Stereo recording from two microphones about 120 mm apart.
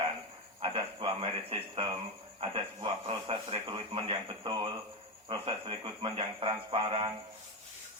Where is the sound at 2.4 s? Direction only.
45° right (ahead or behind).